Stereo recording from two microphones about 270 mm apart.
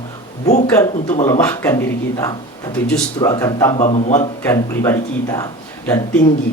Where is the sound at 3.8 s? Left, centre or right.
Left.